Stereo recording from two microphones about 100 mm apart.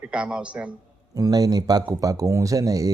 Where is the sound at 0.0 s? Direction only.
10° right (ahead or behind).